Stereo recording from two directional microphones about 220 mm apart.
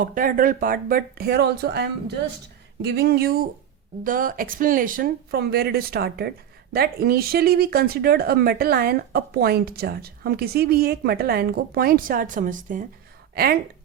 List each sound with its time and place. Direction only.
0.0 s speech: 40° right (ahead or behind)